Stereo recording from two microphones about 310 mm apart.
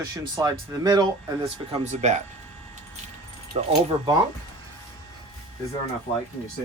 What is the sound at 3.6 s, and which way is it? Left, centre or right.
Speech, centre.